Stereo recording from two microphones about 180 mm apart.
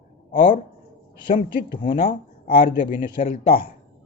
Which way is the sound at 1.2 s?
30° left (ahead or behind).